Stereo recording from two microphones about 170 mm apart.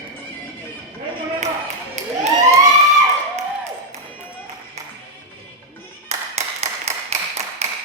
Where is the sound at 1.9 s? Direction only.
40° right (ahead or behind).